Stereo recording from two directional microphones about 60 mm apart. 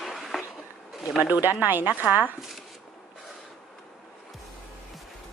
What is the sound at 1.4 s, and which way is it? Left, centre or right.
Speech, right.